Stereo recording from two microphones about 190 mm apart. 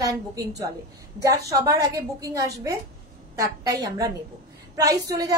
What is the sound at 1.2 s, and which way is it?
A woman's voice, 15° right (ahead or behind).